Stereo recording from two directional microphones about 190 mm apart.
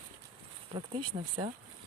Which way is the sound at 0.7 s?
30° right (ahead or behind).